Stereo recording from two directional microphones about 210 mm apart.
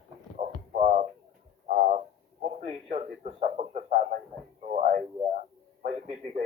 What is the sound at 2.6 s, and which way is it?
Speech, 30° right (ahead or behind).